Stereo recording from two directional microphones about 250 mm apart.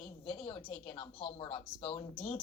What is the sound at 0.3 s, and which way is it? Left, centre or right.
Speech, centre.